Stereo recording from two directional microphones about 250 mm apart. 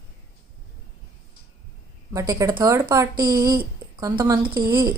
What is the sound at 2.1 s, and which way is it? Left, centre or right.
A woman's voice, centre.